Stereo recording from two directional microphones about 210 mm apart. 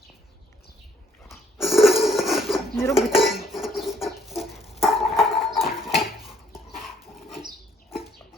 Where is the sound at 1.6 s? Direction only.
Centre (ahead or behind).